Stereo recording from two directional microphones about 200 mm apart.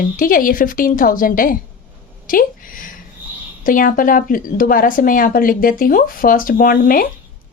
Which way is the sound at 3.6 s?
45° left (ahead or behind).